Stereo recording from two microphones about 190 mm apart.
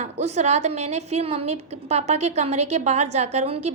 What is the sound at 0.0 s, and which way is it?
A woman's voice, 35° right (ahead or behind).